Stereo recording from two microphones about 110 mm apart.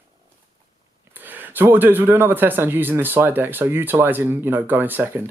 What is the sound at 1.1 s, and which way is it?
Speech, 15° right (ahead or behind).